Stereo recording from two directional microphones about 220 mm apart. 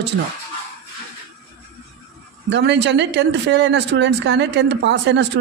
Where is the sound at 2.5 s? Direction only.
50° right (ahead or behind).